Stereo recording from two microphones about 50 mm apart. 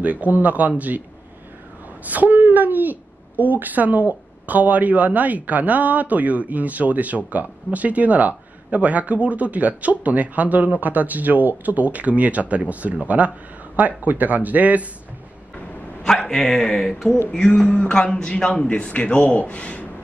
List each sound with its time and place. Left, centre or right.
0.0 s speech: right
2.0 s speech: right
16.1 s a man's voice: centre; by 19.9 s left